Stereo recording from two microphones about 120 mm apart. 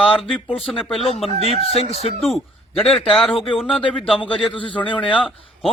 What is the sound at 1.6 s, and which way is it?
Speech, 55° left (ahead or behind).